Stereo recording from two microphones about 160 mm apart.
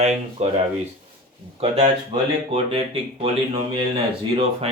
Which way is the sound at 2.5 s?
35° right (ahead or behind).